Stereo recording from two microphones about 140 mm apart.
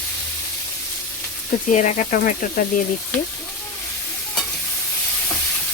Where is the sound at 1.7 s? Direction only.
60° left (ahead or behind).